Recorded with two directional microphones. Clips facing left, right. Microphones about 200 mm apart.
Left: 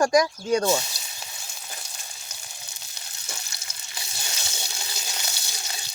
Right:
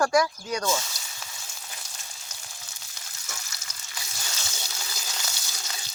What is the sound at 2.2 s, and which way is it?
Water, 15° left (ahead or behind).